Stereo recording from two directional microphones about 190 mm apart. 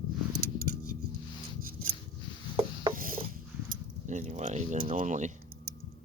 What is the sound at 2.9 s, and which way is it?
Filing, 45° right (ahead or behind).